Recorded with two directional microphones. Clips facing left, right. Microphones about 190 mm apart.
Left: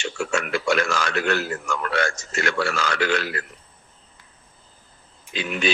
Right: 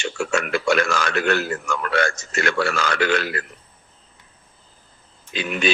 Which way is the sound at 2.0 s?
55° right (ahead or behind).